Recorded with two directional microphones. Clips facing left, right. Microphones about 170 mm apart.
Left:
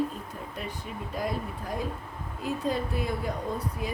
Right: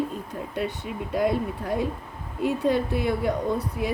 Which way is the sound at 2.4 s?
70° right (ahead or behind).